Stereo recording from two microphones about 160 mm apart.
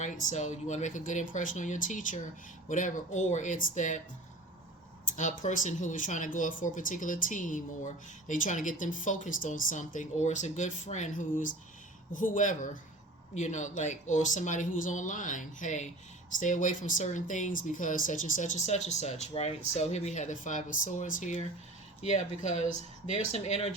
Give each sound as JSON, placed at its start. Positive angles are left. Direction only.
{"t": 0.0, "sound": "speech", "side_deg": 50}
{"t": 5.1, "sound": "speech", "side_deg": 50}